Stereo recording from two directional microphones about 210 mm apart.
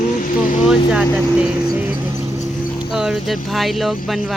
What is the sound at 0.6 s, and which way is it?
Speech, 5° right (ahead or behind).